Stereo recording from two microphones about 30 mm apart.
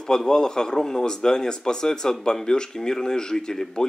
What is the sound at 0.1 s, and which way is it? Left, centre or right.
A man's voice, left.